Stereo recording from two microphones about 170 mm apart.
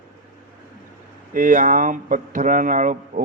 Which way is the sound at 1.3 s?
50° right (ahead or behind).